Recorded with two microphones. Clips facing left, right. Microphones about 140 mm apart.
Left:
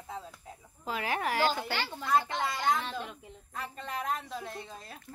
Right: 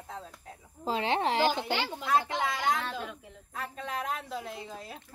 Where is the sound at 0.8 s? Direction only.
25° right (ahead or behind).